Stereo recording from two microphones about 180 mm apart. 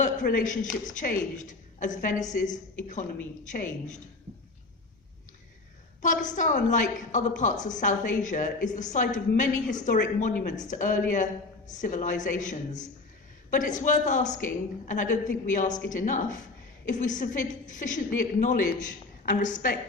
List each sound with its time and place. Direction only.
0.0 s a woman's voice: 50° left (ahead or behind)
3.5 s a woman's voice: 45° left (ahead or behind)
6.2 s a woman's voice: 45° left (ahead or behind)